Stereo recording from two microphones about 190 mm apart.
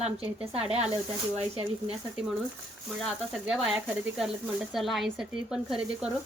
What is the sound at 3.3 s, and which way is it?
Speech, centre (ahead or behind).